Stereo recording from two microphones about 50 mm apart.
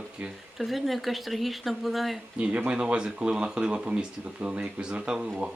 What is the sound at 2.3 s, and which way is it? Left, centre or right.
Speech, right.